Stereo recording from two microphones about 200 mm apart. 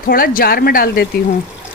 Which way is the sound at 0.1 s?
45° left (ahead or behind).